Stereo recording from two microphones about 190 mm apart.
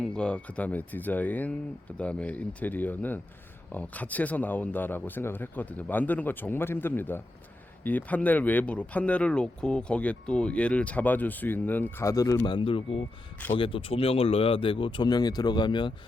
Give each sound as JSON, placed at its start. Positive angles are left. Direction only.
{"t": 0.0, "sound": "speech", "side_deg": 5}